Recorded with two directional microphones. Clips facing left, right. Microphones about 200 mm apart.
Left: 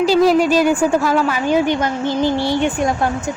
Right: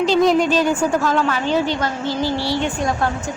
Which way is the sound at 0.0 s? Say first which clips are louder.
Left 2 dB; 5° left (ahead or behind).